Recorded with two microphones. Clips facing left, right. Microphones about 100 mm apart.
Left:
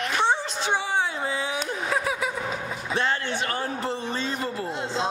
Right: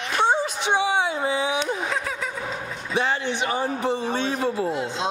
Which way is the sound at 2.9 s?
15° right (ahead or behind).